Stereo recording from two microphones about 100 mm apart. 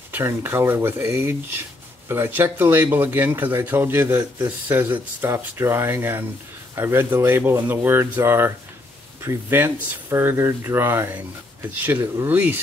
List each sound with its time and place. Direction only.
0.1 s speech: 25° right (ahead or behind)
12.3 s speech: 20° right (ahead or behind)